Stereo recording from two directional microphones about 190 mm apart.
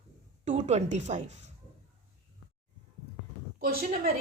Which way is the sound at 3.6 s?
50° right (ahead or behind).